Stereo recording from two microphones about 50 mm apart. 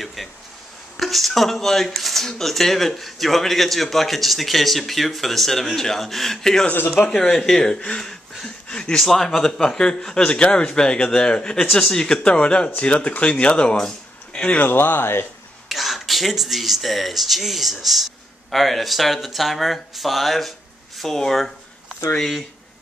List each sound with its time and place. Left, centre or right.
0.0 s a sound: centre
0.9 s speech: centre
9.0 s speech: centre
14.6 s speech: left
15.7 s speech: centre